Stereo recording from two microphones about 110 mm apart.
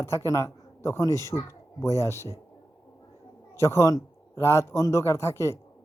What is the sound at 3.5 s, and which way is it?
Speech, 25° left (ahead or behind).